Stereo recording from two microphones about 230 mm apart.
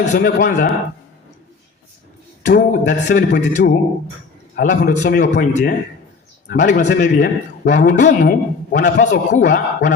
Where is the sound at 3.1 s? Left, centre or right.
Left.